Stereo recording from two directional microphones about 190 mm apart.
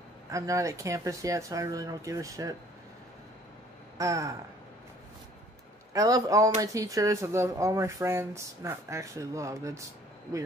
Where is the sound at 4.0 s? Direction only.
15° right (ahead or behind).